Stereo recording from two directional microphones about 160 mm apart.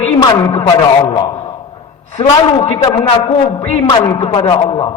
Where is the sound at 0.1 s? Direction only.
30° left (ahead or behind).